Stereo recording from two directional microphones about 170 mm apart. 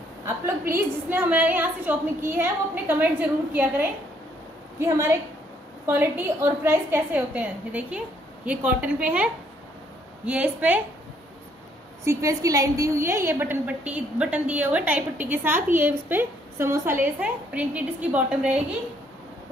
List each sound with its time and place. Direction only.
0.2 s a woman's voice: 10° right (ahead or behind)
12.0 s a woman's voice: 15° right (ahead or behind)